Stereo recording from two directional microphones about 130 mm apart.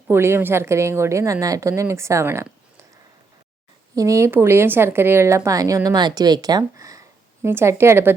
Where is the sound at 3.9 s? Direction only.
25° right (ahead or behind).